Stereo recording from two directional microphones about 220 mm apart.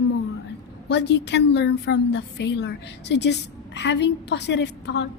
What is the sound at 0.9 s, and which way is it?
A woman's voice, 50° left (ahead or behind).